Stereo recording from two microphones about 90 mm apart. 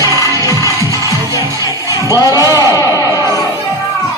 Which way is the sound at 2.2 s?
40° left (ahead or behind).